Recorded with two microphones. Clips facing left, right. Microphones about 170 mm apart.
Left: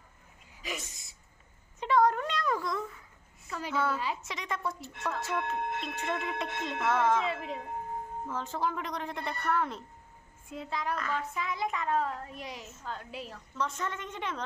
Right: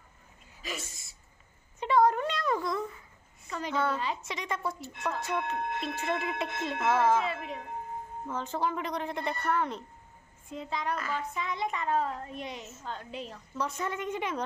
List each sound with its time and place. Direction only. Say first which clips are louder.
0.6 s a sound: even; 15° left (ahead or behind)
1.8 s a sound: right 1 dB; centre (ahead or behind)
3.4 s a woman's voice: right 1 dB; 5° left (ahead or behind)
7.2 s a woman's voice: left 1 dB; 25° left (ahead or behind)
8.3 s a woman's voice: right 2 dB; centre (ahead or behind)
13.6 s a woman's voice: right 2 dB; 10° right (ahead or behind)